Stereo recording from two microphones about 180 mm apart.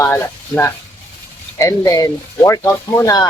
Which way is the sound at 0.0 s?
10° left (ahead or behind).